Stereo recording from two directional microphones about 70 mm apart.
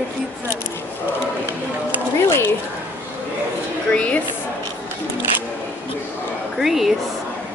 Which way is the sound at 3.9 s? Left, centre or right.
Centre.